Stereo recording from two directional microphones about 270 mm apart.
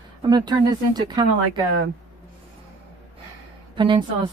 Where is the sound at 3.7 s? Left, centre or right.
Centre.